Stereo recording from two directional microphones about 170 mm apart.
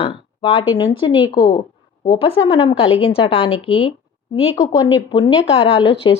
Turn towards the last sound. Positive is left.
turn(degrees=30)  # may be behind; listen again after turning